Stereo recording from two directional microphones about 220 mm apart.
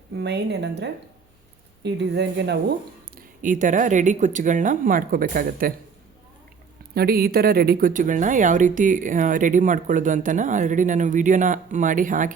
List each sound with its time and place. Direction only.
0.2 s speech: 50° right (ahead or behind)
3.2 s speech: 35° right (ahead or behind)
6.9 s speech: 45° right (ahead or behind)